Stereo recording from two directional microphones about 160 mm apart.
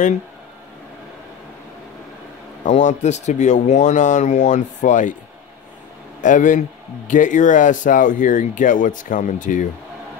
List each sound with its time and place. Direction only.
2.6 s speech: 50° left (ahead or behind)
6.2 s speech: 55° left (ahead or behind)